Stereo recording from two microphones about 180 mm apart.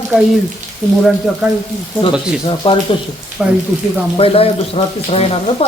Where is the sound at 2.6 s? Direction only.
30° left (ahead or behind).